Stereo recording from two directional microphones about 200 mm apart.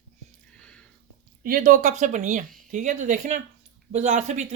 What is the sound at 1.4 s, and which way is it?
Speech, 45° right (ahead or behind).